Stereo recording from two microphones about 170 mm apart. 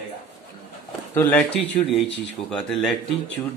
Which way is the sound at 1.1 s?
10° left (ahead or behind).